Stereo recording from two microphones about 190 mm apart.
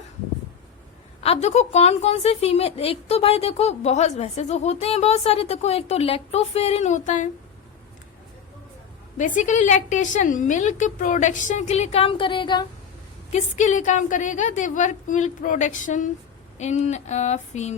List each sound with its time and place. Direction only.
1.2 s a woman's voice: 35° left (ahead or behind)
9.1 s a woman's voice: 40° left (ahead or behind); by 12.6 s 25° left (ahead or behind)
13.3 s a woman's voice: 40° left (ahead or behind)